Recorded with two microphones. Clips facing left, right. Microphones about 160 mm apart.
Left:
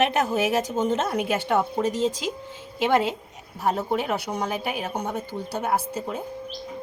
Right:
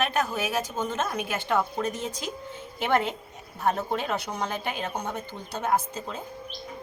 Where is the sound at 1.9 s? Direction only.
90° left.